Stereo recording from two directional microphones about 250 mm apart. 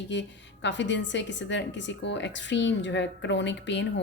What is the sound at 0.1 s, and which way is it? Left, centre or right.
Speech, left.